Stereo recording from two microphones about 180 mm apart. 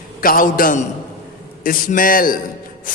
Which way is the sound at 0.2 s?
50° left (ahead or behind).